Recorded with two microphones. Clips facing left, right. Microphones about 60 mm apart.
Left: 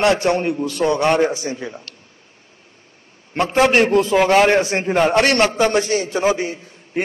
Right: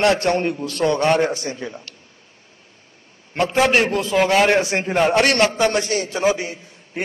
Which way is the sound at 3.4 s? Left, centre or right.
Left.